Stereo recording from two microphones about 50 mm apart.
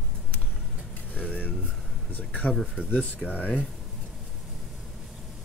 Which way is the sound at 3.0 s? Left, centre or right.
Left.